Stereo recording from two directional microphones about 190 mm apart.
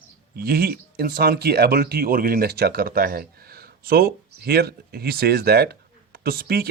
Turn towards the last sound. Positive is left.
turn(degrees=-50)  # may be behind; listen again after turning